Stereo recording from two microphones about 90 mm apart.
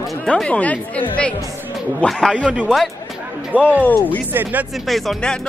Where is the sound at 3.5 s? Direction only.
15° right (ahead or behind).